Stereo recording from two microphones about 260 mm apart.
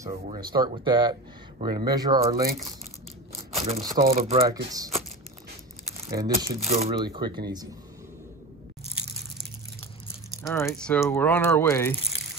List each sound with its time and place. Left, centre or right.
0.0 s speech: centre
3.5 s speech: right
4.7 s speech: centre
6.2 s speech: centre
10.4 s speech: centre